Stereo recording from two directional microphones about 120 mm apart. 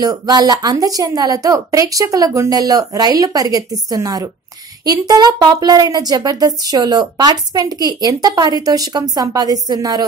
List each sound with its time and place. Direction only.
0.0 s speech: 30° right (ahead or behind)